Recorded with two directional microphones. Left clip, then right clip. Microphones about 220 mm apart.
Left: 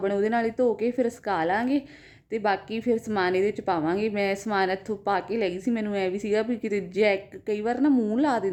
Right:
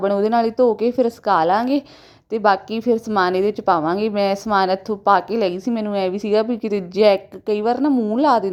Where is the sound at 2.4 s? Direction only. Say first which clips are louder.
Right 9 dB; 25° right (ahead or behind).